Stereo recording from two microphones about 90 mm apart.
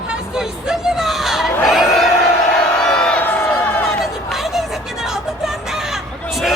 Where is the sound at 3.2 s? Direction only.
20° left (ahead or behind).